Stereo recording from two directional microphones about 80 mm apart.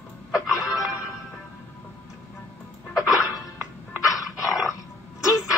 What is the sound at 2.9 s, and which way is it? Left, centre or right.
Music, left.